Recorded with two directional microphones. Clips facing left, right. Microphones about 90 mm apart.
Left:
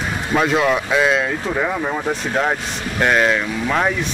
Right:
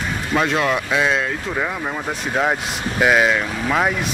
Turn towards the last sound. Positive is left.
turn(degrees=-5)  # may be behind; listen again after turning